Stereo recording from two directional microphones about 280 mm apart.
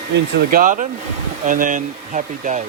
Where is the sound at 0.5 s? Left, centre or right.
Right.